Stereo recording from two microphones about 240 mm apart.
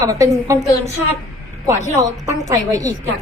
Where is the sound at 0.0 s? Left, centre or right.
Centre.